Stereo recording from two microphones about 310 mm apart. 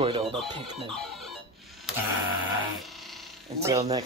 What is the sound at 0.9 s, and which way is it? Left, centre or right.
Chicken, centre.